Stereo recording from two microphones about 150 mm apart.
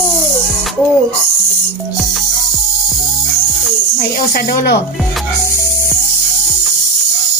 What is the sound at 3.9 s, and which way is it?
Speech, 65° left (ahead or behind).